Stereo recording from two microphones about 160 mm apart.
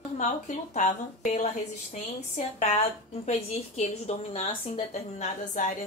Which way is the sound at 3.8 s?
45° left (ahead or behind).